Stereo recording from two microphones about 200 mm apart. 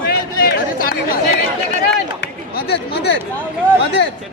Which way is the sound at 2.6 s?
55° left (ahead or behind).